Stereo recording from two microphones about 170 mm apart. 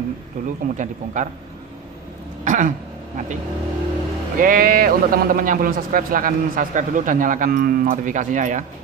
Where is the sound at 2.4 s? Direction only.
45° right (ahead or behind).